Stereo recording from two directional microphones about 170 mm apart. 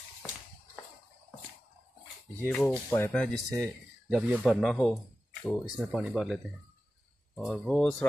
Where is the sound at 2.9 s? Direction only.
10° left (ahead or behind).